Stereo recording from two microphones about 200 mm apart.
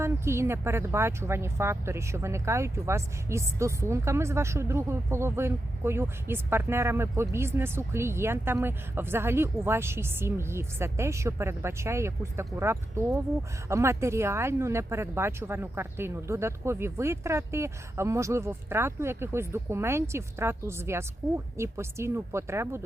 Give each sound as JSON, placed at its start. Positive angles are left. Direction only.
{"t": 0.0, "sound": "speech", "side_deg": -15}